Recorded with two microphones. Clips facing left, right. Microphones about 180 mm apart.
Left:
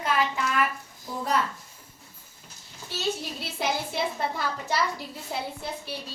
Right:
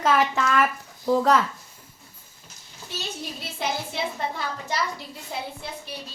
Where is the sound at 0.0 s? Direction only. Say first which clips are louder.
Right 5 dB; 90° right.